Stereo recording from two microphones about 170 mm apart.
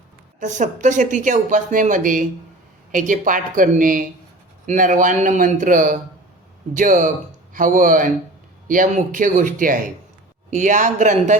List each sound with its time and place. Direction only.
0.3 s a woman's voice: 45° right (ahead or behind)